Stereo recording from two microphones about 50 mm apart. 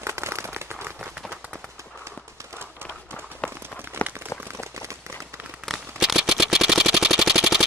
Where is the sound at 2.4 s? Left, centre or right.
Right.